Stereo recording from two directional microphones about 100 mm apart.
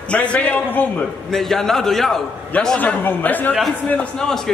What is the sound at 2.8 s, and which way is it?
Speech, 15° left (ahead or behind).